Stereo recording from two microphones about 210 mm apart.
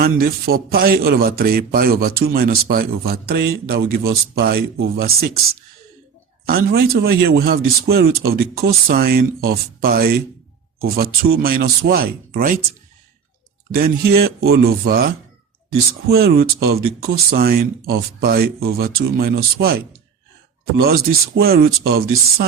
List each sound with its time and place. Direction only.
0.0 s a man's voice: 45° right (ahead or behind)
6.4 s a man's voice: 45° right (ahead or behind)
13.7 s a man's voice: 45° right (ahead or behind)